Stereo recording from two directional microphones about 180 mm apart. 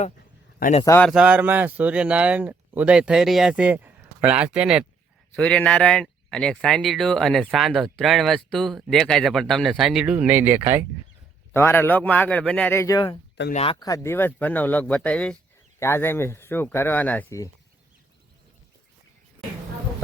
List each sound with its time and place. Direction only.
0.6 s speech: 35° left (ahead or behind)
0.9 s speech: 10° left (ahead or behind)
1.1 s speech: 5° right (ahead or behind)
5.4 s speech: 5° left (ahead or behind); by 10.8 s 10° right (ahead or behind)
11.5 s speech: 15° left (ahead or behind)
13.5 s speech: 35° left (ahead or behind)
13.7 s speech: 20° left (ahead or behind)